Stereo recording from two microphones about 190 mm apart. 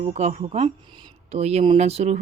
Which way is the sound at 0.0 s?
35° right (ahead or behind).